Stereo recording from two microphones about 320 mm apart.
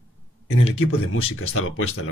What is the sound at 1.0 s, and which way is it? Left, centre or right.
Speech, left.